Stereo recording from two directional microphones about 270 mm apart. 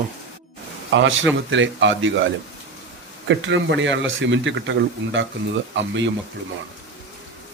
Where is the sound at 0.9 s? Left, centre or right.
Right.